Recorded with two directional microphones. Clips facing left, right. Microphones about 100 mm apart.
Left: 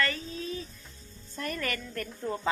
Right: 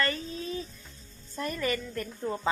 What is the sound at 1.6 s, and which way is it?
Speech, 15° right (ahead or behind).